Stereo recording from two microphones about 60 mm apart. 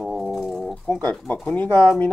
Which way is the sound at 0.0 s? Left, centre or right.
Centre.